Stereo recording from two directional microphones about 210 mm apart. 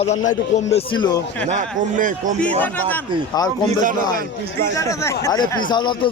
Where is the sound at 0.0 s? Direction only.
35° left (ahead or behind).